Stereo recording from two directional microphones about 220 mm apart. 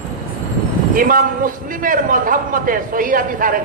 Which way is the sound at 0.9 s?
40° right (ahead or behind).